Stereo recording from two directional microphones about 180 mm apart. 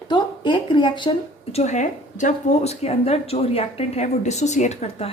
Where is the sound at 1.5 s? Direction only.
40° left (ahead or behind).